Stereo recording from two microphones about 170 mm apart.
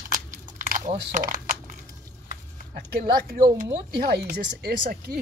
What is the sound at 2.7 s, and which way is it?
Speech, 65° right (ahead or behind).